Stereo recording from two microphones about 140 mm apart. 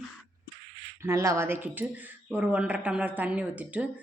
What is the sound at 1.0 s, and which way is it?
A woman's voice, 20° right (ahead or behind).